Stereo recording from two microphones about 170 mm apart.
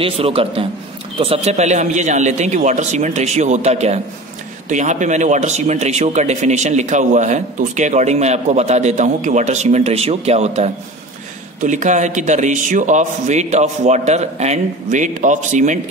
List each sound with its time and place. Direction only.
0.0 s a man's voice: 35° right (ahead or behind)